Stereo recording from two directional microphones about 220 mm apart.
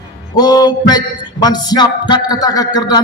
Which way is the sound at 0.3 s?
20° left (ahead or behind).